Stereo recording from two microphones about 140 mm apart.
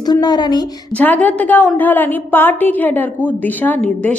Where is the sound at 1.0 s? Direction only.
10° left (ahead or behind).